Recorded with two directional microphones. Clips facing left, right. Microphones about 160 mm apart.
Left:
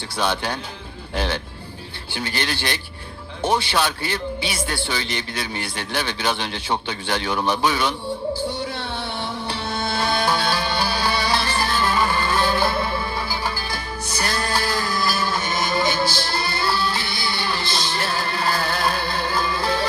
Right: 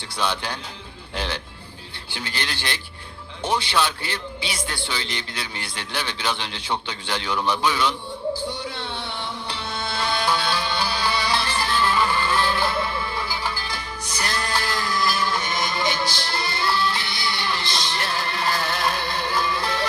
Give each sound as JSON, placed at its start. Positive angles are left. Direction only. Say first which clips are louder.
{"t": 0.2, "sound": "a man's voice", "louder": "left 3 dB", "side_deg": 45}
{"t": 8.9, "sound": "music", "louder": "left 3 dB", "side_deg": 50}